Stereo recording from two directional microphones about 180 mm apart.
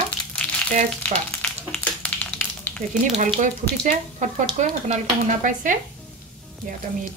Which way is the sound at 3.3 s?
45° right (ahead or behind).